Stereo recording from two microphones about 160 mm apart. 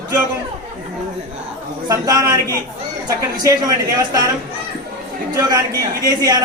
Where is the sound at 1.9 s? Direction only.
20° right (ahead or behind).